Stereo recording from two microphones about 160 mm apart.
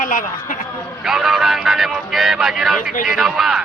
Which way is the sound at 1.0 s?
5° right (ahead or behind).